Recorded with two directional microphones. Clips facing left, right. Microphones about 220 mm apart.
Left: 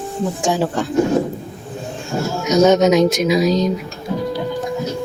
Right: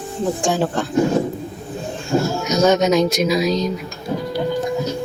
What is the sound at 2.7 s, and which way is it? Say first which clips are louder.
Speech: left 3 dB; 20° left (ahead or behind).